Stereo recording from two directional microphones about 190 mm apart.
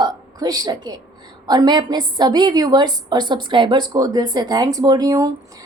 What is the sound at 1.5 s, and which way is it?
A woman's voice, 20° right (ahead or behind).